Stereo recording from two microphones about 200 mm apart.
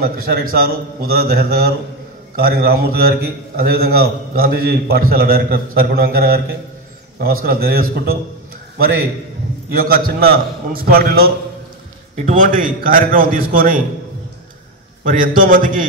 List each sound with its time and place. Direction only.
0.0 s a man's voice: 45° right (ahead or behind)
9.8 s a man's voice: 45° right (ahead or behind)
12.3 s a man's voice: 40° right (ahead or behind)
15.0 s a man's voice: 45° right (ahead or behind)